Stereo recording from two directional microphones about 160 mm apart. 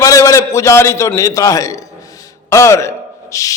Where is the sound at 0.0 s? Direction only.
20° left (ahead or behind).